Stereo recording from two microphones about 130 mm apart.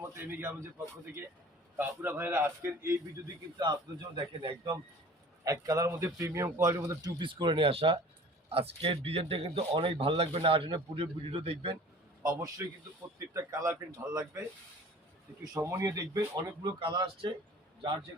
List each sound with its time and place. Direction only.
0.0 s a man's voice: 15° right (ahead or behind)
1.8 s a man's voice: 15° right (ahead or behind)
3.6 s a man's voice: 35° right (ahead or behind)
5.5 s speech: 25° right (ahead or behind)
7.2 s a man's voice: 40° right (ahead or behind)
12.2 s speech: 25° right (ahead or behind)
15.5 s speech: 25° right (ahead or behind)
16.8 s a man's voice: 35° right (ahead or behind)